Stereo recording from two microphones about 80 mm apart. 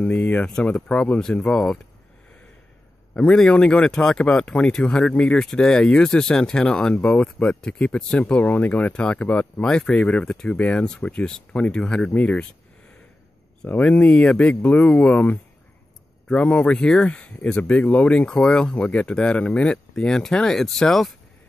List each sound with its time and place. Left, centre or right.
0.0 s speech: left
3.2 s speech: centre
13.7 s speech: centre
16.3 s speech: centre